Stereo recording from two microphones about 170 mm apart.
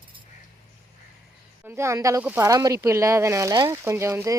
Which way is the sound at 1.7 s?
15° right (ahead or behind).